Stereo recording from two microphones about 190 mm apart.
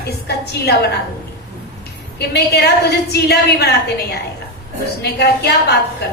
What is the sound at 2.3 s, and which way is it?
A woman's voice, 60° left (ahead or behind).